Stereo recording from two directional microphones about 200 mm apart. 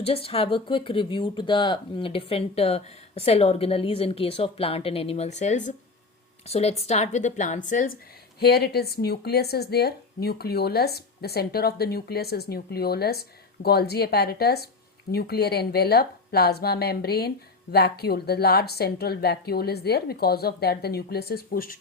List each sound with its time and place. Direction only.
0.0 s speech: 30° left (ahead or behind)
8.4 s a woman's voice: 50° left (ahead or behind)